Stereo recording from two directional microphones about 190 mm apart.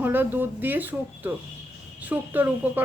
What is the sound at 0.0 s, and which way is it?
A woman's voice, 10° right (ahead or behind).